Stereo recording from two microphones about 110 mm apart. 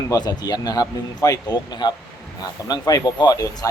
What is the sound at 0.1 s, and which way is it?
Speech, 35° left (ahead or behind).